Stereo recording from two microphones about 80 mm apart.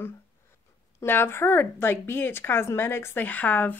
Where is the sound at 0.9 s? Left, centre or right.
Left.